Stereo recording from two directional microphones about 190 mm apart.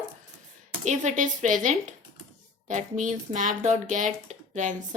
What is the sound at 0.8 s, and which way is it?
Speech, 40° right (ahead or behind).